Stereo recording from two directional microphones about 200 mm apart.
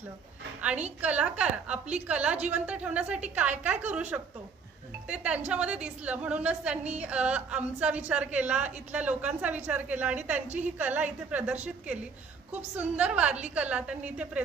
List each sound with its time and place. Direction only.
1.0 s a woman's voice: 5° right (ahead or behind)
5.0 s a woman's voice: 5° right (ahead or behind)